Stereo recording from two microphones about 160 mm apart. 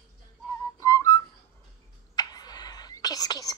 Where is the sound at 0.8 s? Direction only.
20° left (ahead or behind).